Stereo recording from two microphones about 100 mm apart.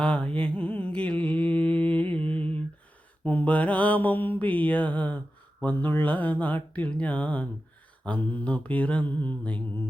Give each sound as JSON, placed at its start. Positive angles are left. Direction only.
{"t": 0.0, "sound": "mantra", "side_deg": 10}